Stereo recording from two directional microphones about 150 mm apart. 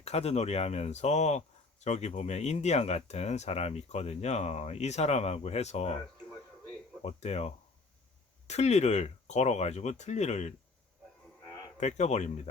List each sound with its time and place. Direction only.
0.0 s speech: 45° left (ahead or behind)
7.0 s speech: 45° left (ahead or behind)
11.8 s speech: 50° left (ahead or behind)